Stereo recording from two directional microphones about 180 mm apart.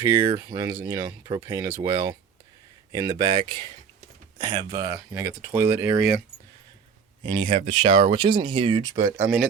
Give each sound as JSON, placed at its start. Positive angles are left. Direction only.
{"t": 0.3, "sound": "speech", "side_deg": -25}
{"t": 7.2, "sound": "speech", "side_deg": -25}